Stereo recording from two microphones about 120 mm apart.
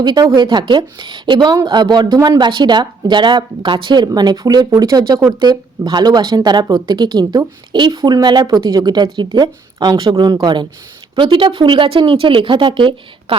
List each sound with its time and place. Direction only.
0.0 s a woman's voice: 35° right (ahead or behind)